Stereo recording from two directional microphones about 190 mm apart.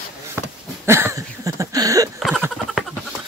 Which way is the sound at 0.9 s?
15° right (ahead or behind).